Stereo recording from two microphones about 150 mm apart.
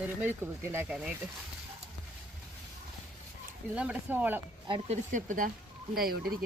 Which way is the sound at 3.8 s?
10° right (ahead or behind).